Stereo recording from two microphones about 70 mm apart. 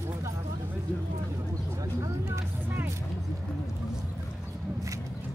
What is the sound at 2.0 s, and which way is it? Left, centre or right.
Vehicle, right.